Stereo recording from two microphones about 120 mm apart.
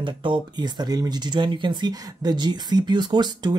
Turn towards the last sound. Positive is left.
turn(degrees=-40)  # may be behind; listen again after turning